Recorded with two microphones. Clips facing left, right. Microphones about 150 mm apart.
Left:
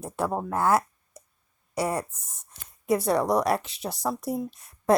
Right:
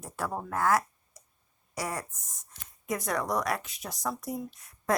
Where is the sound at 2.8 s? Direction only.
30° left (ahead or behind).